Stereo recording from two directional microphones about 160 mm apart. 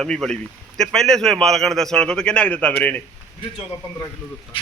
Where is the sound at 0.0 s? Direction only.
5° left (ahead or behind).